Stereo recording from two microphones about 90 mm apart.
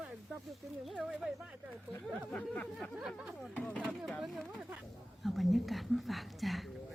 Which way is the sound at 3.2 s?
5° right (ahead or behind).